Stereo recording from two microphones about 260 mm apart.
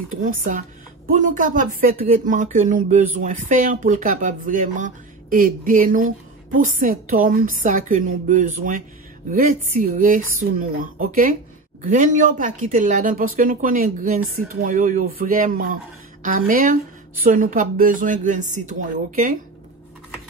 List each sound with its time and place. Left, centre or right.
0.1 s speech: right